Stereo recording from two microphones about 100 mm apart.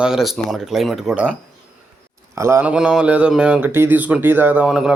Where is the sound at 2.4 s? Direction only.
25° right (ahead or behind).